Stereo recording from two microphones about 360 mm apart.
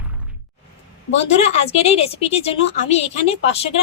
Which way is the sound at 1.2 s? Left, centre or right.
Centre.